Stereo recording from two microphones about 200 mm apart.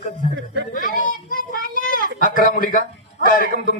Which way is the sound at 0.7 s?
40° left (ahead or behind).